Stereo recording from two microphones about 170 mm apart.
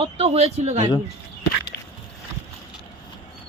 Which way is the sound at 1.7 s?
65° left (ahead or behind).